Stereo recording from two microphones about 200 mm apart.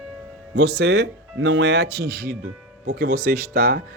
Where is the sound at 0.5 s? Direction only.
55° right (ahead or behind).